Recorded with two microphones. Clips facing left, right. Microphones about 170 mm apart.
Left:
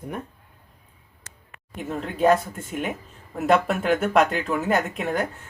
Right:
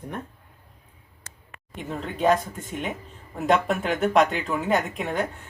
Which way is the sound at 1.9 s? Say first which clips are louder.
Left 2 dB; 5° left (ahead or behind).